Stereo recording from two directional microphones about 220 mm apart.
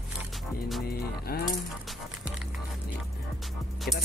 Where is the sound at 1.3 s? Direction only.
45° left (ahead or behind).